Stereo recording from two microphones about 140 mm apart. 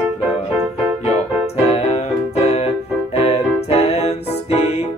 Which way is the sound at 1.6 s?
50° left (ahead or behind).